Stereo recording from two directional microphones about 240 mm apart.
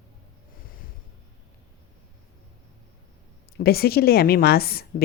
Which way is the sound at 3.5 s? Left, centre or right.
Left.